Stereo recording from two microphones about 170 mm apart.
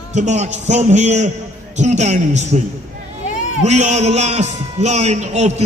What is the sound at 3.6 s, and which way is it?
A man's voice, 45° right (ahead or behind).